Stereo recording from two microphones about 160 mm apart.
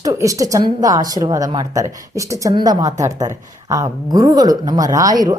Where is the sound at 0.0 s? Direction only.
20° right (ahead or behind).